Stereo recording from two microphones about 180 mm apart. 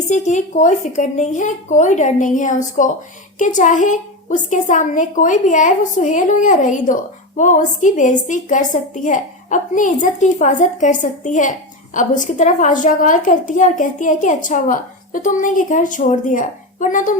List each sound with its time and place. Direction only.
0.1 s a woman's voice: 40° left (ahead or behind)